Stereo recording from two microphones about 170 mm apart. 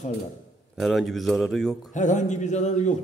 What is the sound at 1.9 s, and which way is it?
A man's voice, 45° left (ahead or behind).